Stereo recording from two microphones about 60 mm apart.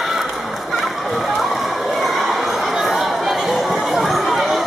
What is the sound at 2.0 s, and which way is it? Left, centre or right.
Chatter, centre.